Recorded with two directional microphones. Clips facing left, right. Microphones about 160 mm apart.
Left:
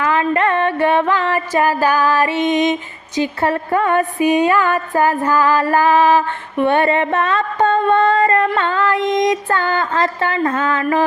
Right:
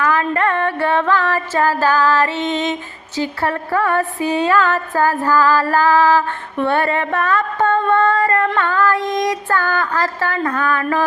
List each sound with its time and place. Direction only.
0.0 s music: 20° left (ahead or behind)
3.2 s speech: 20° left (ahead or behind)